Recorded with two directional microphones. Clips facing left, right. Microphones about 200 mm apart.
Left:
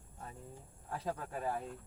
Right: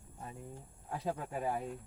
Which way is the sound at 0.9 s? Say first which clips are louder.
Right 2 dB; 10° right (ahead or behind).